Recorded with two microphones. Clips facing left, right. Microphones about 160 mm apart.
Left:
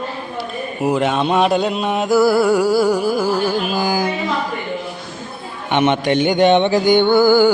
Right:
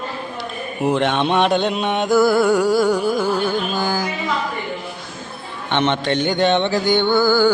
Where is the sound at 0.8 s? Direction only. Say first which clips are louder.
Left 1 dB; 5° left (ahead or behind).